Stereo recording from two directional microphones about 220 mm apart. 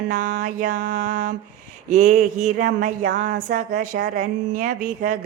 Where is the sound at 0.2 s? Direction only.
35° right (ahead or behind).